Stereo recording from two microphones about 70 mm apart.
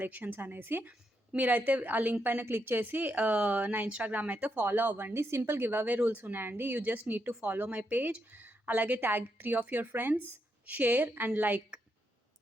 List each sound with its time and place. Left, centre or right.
0.0 s a woman's voice: right